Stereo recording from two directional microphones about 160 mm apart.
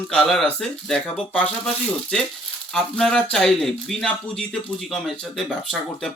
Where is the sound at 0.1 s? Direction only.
5° left (ahead or behind).